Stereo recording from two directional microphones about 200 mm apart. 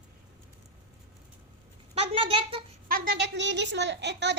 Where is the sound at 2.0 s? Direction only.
30° right (ahead or behind).